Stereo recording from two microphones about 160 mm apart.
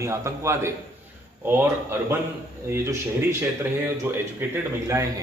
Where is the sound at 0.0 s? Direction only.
20° right (ahead or behind).